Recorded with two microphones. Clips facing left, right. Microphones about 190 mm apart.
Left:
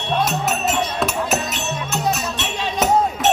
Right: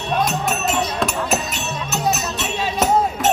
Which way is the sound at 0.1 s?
5° right (ahead or behind).